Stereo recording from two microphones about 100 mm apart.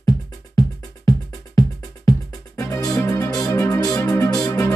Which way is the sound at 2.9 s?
35° left (ahead or behind).